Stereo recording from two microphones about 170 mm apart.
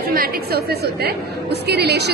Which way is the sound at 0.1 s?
60° right (ahead or behind).